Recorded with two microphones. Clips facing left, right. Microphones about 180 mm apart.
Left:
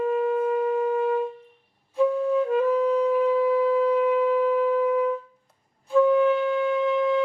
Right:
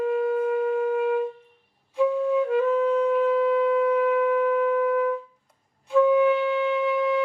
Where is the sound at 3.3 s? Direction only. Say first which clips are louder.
Even; 10° left (ahead or behind).